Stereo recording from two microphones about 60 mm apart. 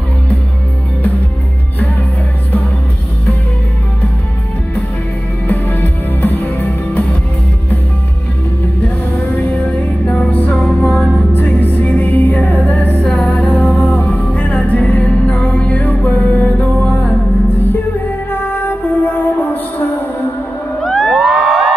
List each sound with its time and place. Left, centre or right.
5.5 s music: left
8.8 s music: left
9.7 s music: centre
18.3 s music: left
20.8 s crowd: centre
21.1 s music: centre